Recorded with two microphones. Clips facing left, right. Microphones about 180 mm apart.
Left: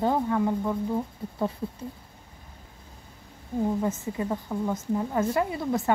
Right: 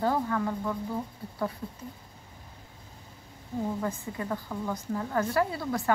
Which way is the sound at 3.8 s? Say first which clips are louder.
Left 5 dB; 20° left (ahead or behind).